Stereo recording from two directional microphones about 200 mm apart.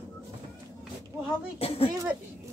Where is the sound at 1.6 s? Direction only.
30° left (ahead or behind).